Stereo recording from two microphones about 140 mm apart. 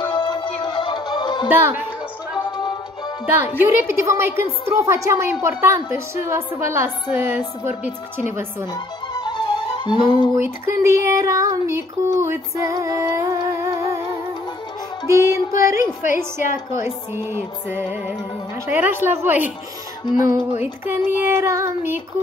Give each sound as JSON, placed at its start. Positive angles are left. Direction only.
{"t": 0.1, "sound": "music", "side_deg": 35}
{"t": 1.5, "sound": "a woman's voice", "side_deg": -15}
{"t": 3.5, "sound": "a sound", "side_deg": -20}
{"t": 6.2, "sound": "a woman's voice", "side_deg": -20}
{"t": 8.7, "sound": "music", "side_deg": 30}
{"t": 10.3, "sound": "a sound", "side_deg": -20}
{"t": 15.0, "sound": "a sound", "side_deg": -20}
{"t": 16.7, "sound": "a woman's voice", "side_deg": -20}
{"t": 20.5, "sound": "a woman's voice", "side_deg": -15}